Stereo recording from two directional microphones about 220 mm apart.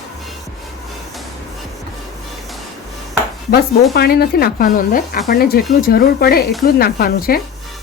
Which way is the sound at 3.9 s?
45° left (ahead or behind).